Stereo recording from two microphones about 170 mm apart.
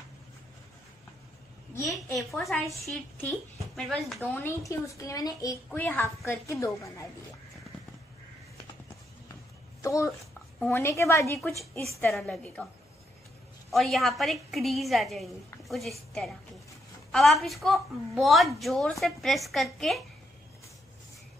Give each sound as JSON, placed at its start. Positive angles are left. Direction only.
{"t": 2.1, "sound": "a woman's voice", "side_deg": 5}
{"t": 9.8, "sound": "a woman's voice", "side_deg": 20}
{"t": 12.0, "sound": "a woman's voice", "side_deg": 5}
{"t": 13.7, "sound": "a woman's voice", "side_deg": 0}
{"t": 17.1, "sound": "a woman's voice", "side_deg": 0}